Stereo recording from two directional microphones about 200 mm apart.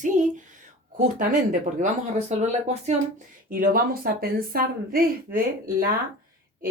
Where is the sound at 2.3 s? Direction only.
35° right (ahead or behind).